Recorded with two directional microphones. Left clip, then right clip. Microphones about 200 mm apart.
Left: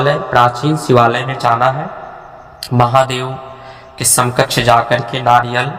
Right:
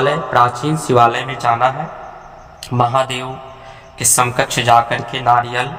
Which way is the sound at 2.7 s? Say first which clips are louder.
Left 4 dB; 30° left (ahead or behind).